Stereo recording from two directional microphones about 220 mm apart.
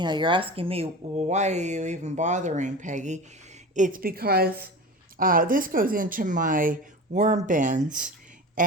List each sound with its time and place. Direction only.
0.0 s a woman's voice: 20° right (ahead or behind); by 7.8 s 35° right (ahead or behind)